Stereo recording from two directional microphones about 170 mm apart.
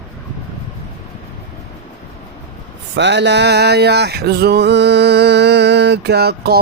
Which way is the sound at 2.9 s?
90° right.